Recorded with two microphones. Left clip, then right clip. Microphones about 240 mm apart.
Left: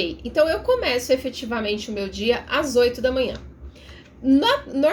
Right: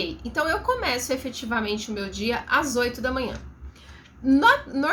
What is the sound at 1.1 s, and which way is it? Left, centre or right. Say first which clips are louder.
Speech: left 5 dB; right.